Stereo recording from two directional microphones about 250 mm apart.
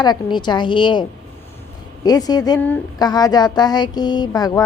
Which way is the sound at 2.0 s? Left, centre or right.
Centre.